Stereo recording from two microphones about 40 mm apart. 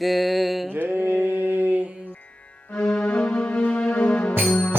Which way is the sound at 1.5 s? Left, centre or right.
Right.